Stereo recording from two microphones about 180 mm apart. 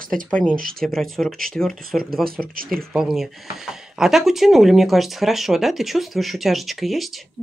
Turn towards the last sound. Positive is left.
turn(degrees=0)  # may be behind; listen again after turning